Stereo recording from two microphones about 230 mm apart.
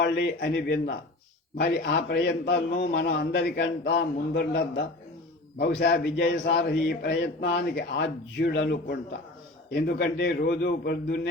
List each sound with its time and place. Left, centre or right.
0.0 s a man's voice: left